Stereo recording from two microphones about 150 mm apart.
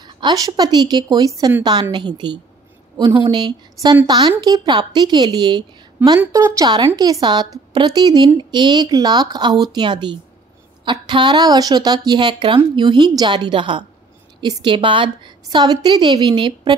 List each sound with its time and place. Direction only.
0.0 s a woman's voice: 25° right (ahead or behind)
6.1 s a woman's voice: 20° right (ahead or behind)